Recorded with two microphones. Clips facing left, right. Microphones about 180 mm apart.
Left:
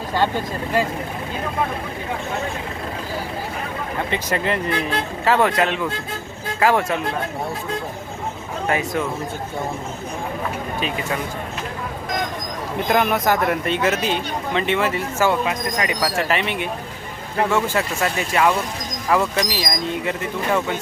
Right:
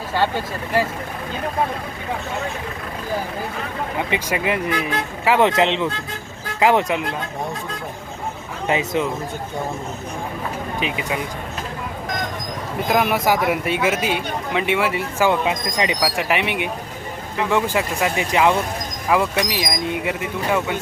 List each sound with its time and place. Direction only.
4.1 s a man's voice: 10° right (ahead or behind)
5.5 s a man's voice: 20° right (ahead or behind)
8.6 s speech: 20° right (ahead or behind)
10.8 s a man's voice: 15° right (ahead or behind)
12.9 s a man's voice: 5° right (ahead or behind)